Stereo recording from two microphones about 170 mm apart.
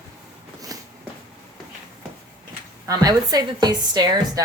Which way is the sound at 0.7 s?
20° right (ahead or behind).